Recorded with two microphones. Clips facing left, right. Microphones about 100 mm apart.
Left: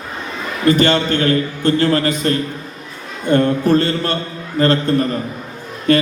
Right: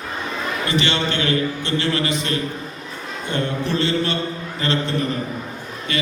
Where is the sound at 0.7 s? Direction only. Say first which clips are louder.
Left 9 dB; 45° left (ahead or behind).